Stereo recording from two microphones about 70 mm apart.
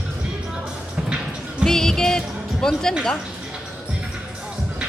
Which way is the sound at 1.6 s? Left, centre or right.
Centre.